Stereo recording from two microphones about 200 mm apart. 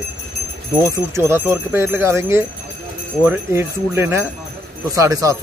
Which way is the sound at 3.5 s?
10° right (ahead or behind).